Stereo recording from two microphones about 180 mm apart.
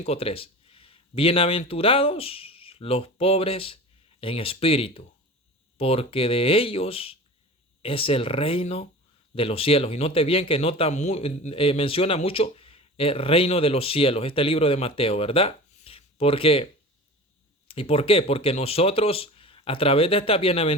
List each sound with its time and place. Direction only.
0.0 s speech: 35° left (ahead or behind)
17.7 s speech: 30° left (ahead or behind)